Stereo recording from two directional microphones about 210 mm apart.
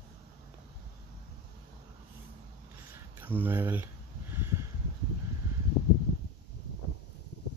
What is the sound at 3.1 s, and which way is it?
Speech, 10° right (ahead or behind).